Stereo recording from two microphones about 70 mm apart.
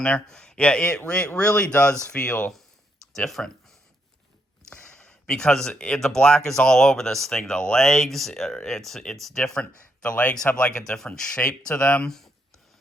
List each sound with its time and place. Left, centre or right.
0.0 s speech: centre
3.2 s speech: centre
4.7 s speech: centre